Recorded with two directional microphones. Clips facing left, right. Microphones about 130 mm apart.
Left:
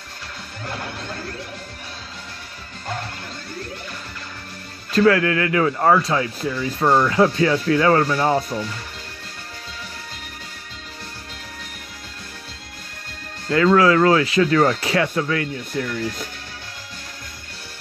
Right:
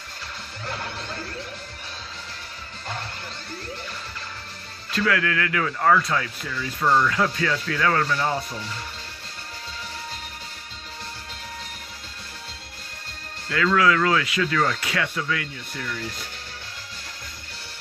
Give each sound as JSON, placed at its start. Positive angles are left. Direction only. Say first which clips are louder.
{"t": 4.9, "sound": "speech", "louder": "left 8 dB", "side_deg": 35}
{"t": 8.1, "sound": "speech", "louder": "left 6 dB", "side_deg": 40}
{"t": 13.5, "sound": "speech", "louder": "left 5 dB", "side_deg": 35}